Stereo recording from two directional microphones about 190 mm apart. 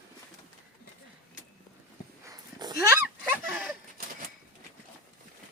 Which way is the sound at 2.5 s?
20° right (ahead or behind).